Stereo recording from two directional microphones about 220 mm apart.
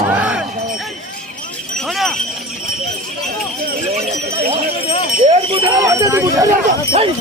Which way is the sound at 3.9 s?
30° right (ahead or behind).